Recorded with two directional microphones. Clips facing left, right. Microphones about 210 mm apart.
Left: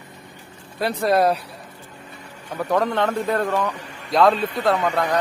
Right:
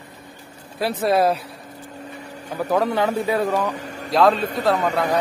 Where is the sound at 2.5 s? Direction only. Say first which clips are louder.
Right 1 dB; 5° right (ahead or behind).